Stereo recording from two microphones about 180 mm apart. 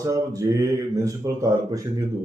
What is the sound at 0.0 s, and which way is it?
Speech, 20° right (ahead or behind).